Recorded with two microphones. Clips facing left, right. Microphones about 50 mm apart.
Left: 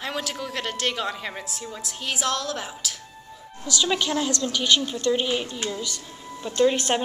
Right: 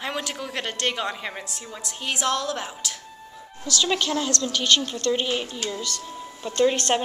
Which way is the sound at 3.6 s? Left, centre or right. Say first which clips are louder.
Even; centre.